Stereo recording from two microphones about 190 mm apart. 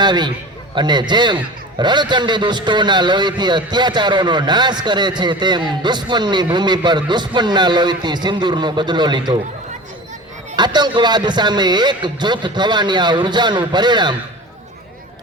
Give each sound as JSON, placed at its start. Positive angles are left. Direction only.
{"t": 0.0, "sound": "a man's voice", "side_deg": -25}
{"t": 10.5, "sound": "a man's voice", "side_deg": -25}